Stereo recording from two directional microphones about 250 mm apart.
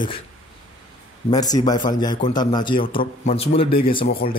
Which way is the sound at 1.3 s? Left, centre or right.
Centre.